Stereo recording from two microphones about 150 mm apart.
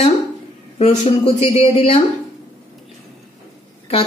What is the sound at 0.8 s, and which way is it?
Speech, 45° left (ahead or behind).